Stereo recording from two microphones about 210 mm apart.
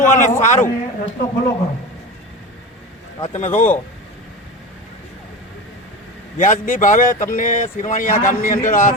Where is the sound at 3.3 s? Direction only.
35° left (ahead or behind).